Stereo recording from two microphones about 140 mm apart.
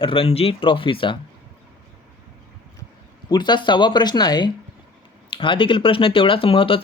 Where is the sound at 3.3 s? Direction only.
30° left (ahead or behind).